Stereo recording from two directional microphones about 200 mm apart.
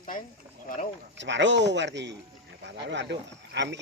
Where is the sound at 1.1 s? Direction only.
60° right (ahead or behind).